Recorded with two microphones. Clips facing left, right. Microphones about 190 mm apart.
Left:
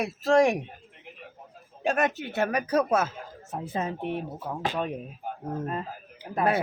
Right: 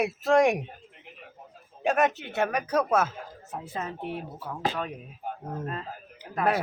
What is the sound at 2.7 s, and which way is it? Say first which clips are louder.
Speech: even; 40° left (ahead or behind).